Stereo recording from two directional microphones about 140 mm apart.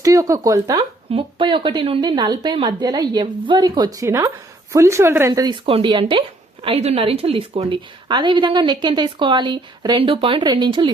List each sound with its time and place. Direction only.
0.0 s speech: 25° right (ahead or behind)
1.1 s a woman's voice: 35° right (ahead or behind)
5.6 s a woman's voice: 40° right (ahead or behind)